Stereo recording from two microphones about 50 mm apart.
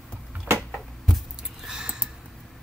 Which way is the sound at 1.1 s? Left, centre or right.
Centre.